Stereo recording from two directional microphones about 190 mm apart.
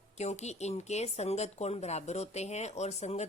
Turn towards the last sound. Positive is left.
turn(degrees=35)  # may be behind; listen again after turning